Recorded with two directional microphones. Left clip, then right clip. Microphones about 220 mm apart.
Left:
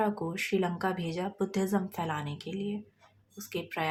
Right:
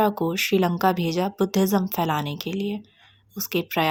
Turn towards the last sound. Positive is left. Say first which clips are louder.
# right 10 dB
turn(degrees=-40)  # may be behind; listen again after turning